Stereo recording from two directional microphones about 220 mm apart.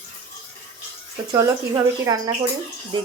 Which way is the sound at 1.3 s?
15° right (ahead or behind).